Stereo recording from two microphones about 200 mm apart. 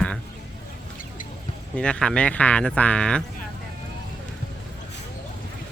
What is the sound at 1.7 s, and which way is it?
Speech, 5° left (ahead or behind).